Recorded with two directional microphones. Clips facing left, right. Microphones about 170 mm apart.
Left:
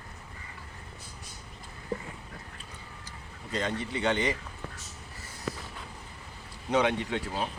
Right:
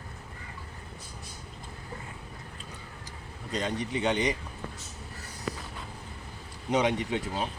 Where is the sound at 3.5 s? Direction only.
15° right (ahead or behind).